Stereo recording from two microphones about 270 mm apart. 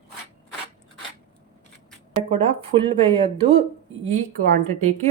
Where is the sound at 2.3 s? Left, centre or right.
Centre.